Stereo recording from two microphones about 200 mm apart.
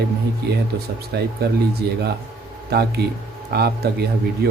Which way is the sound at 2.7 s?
55° right (ahead or behind).